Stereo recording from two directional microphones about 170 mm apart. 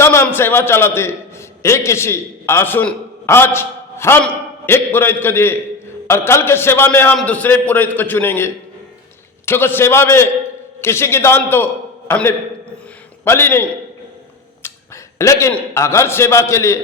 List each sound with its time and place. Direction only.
0.0 s a man's voice: 15° left (ahead or behind)